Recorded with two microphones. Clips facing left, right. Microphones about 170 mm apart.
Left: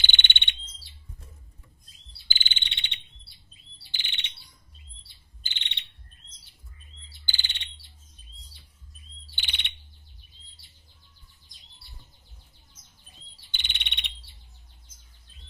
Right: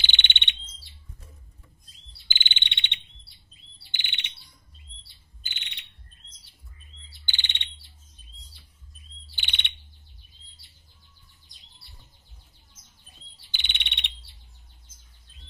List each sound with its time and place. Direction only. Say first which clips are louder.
0.0 s bird: even; 45° left (ahead or behind)
2.2 s cricket: right 2 dB; 35° left (ahead or behind)
3.9 s chirp: right 1 dB; 30° left (ahead or behind)
5.4 s bird: left 2 dB; 30° left (ahead or behind)
7.2 s bird: right 2 dB; 35° left (ahead or behind)
9.3 s bird vocalization: right 2 dB; centre (ahead or behind)
13.5 s frog: right 1 dB; centre (ahead or behind)